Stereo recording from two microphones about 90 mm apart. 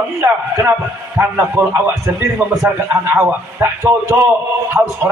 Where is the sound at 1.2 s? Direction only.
25° right (ahead or behind).